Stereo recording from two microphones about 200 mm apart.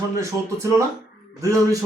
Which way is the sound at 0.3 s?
15° right (ahead or behind).